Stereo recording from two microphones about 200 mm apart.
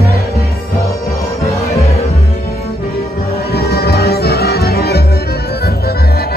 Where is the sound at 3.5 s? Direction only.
50° left (ahead or behind).